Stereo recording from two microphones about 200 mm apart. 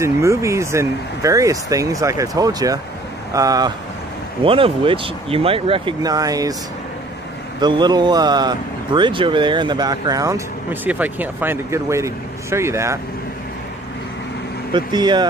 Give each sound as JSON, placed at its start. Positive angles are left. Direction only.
{"t": 0.0, "sound": "speech", "side_deg": -15}
{"t": 7.6, "sound": "speech", "side_deg": -20}
{"t": 14.7, "sound": "speech", "side_deg": -20}